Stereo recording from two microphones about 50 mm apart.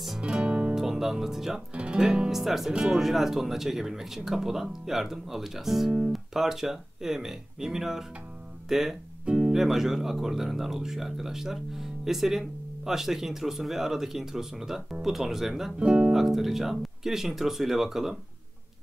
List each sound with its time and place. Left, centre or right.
0.2 s music: right
0.7 s speech: centre
1.8 s music: right
2.0 s speech: centre
9.2 s music: centre
9.6 s speech: centre
15.8 s speech: right
16.1 s speech: centre